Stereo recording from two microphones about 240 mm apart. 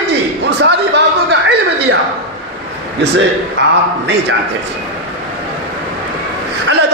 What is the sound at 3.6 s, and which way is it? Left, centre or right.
Speech, right.